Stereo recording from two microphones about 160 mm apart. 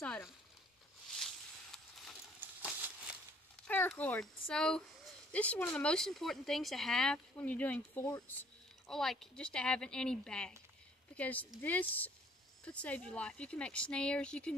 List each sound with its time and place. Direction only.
1.1 s a sound: centre (ahead or behind)
3.6 s speech: 10° left (ahead or behind)
8.8 s speech: centre (ahead or behind)